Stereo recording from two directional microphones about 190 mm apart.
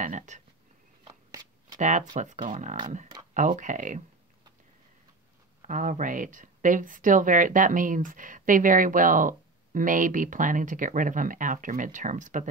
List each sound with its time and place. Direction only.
0.0 s speech: 40° right (ahead or behind)
1.0 s a sound: 20° right (ahead or behind)
1.8 s speech: 40° right (ahead or behind)
5.6 s speech: 45° right (ahead or behind)